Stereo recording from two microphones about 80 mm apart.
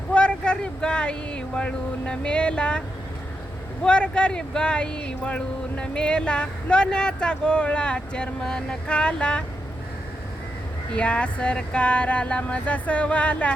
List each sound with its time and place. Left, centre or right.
0.1 s speech: centre
3.8 s speech: centre
10.9 s speech: centre